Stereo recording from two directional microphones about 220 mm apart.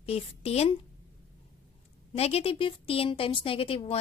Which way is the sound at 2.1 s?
25° left (ahead or behind).